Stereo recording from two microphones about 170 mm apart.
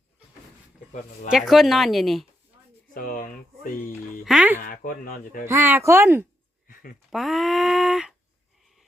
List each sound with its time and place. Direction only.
1.3 s speech: centre (ahead or behind)
2.9 s a sound: 55° left (ahead or behind)
4.3 s speech: 10° right (ahead or behind)
4.6 s speech: 55° left (ahead or behind)
5.5 s speech: 10° right (ahead or behind)
7.1 s speech: centre (ahead or behind)